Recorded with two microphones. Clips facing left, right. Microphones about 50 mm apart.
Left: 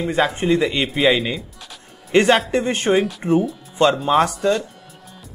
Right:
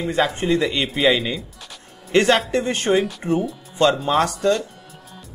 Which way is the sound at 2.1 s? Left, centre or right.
Left.